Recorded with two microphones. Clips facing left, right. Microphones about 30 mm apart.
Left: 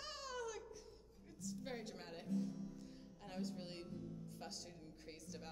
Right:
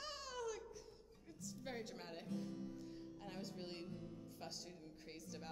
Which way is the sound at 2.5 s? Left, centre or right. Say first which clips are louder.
Even; right.